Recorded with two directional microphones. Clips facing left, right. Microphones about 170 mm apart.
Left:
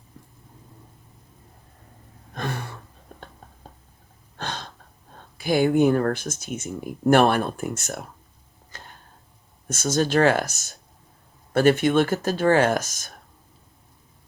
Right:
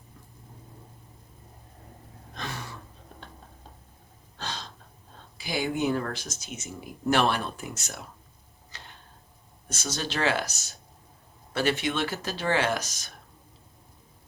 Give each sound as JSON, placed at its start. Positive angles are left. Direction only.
{"t": 2.3, "sound": "a sound", "side_deg": 55}
{"t": 4.4, "sound": "gasp", "side_deg": 55}
{"t": 5.4, "sound": "speech", "side_deg": 55}
{"t": 8.7, "sound": "tick-tock", "side_deg": 45}
{"t": 9.6, "sound": "speech", "side_deg": 50}